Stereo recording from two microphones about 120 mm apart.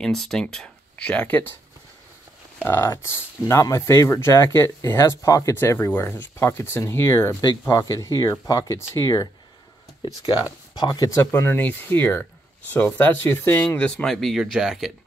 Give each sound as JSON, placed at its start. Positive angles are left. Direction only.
{"t": 0.0, "sound": "speech", "side_deg": 5}
{"t": 2.6, "sound": "speech", "side_deg": 20}
{"t": 10.4, "sound": "speech", "side_deg": 35}